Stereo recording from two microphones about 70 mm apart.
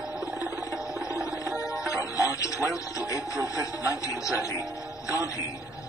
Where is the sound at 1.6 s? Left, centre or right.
Left.